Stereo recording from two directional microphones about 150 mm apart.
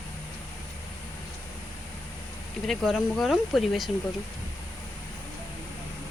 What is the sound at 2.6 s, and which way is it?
Speech, centre (ahead or behind).